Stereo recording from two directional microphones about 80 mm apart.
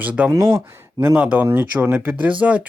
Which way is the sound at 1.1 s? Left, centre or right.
Centre.